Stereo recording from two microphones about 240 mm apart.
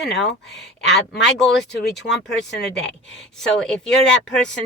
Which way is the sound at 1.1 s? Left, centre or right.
Left.